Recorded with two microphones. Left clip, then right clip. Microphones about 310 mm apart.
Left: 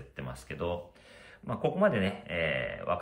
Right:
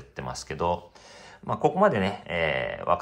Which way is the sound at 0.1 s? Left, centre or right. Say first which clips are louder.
Right 8 dB; centre.